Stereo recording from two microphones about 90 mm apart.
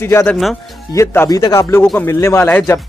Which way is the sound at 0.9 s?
40° left (ahead or behind).